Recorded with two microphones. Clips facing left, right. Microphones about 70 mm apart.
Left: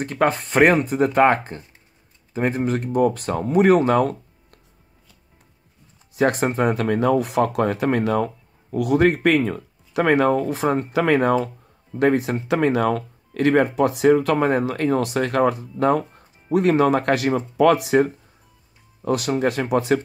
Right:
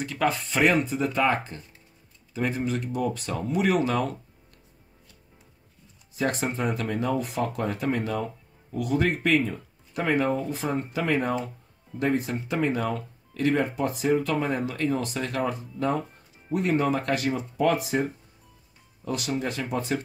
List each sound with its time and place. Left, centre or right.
0.0 s speech: left
6.1 s speech: left
16.5 s speech: left
17.6 s speech: left
19.0 s speech: left